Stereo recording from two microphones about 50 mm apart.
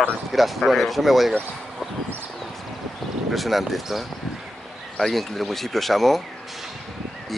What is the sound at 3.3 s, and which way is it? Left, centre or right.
Speech, centre.